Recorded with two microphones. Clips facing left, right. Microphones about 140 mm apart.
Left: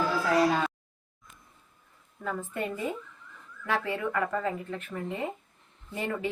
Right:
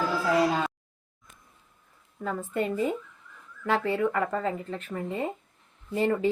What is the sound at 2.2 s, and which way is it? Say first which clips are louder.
Speech: right 4 dB; 30° right (ahead or behind).